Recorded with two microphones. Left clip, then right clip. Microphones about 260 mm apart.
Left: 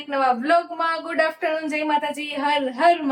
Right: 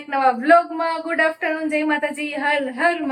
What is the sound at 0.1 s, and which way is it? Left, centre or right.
A woman's voice, centre.